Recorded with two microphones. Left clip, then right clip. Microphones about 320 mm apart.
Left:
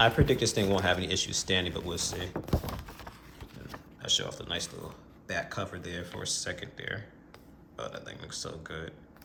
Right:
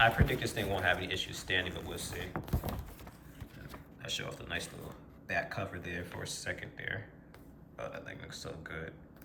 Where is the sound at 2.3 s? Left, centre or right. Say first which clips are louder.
Left 5 dB; centre.